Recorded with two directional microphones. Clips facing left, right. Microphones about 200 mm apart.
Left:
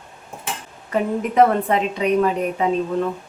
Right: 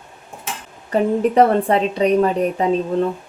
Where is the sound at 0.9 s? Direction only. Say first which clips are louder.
Right 3 dB; 35° right (ahead or behind).